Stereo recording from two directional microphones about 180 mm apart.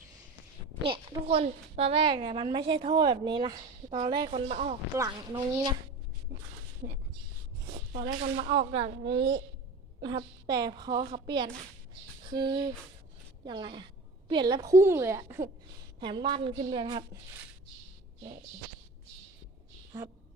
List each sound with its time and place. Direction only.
0.8 s a woman's voice: 30° right (ahead or behind)
4.9 s a woman's voice: 15° right (ahead or behind)
8.2 s a woman's voice: 30° right (ahead or behind)
9.0 s a woman's voice: 75° right (ahead or behind)
10.0 s a woman's voice: 25° right (ahead or behind)
16.0 s a woman's voice: 25° right (ahead or behind)